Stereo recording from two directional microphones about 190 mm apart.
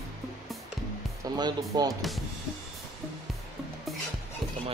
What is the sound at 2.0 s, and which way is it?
Speech, centre (ahead or behind).